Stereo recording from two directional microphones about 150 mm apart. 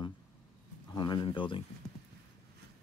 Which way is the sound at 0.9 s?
30° left (ahead or behind).